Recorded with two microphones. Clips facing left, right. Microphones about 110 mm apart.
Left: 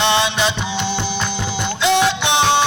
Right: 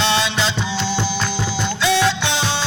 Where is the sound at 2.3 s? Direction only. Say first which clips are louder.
Left 7 dB; 60° left (ahead or behind).